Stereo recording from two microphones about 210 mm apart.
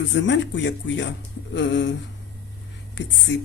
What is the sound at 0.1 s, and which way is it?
Speech, 60° left (ahead or behind).